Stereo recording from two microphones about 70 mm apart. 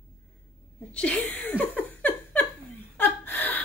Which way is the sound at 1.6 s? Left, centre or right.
Left.